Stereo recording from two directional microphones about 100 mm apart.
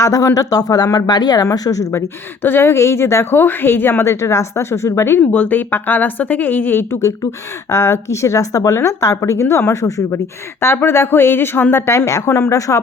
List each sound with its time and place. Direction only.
0.0 s a woman's voice: 30° left (ahead or behind)